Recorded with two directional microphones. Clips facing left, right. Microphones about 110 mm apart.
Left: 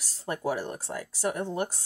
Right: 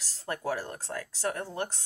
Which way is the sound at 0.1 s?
15° left (ahead or behind).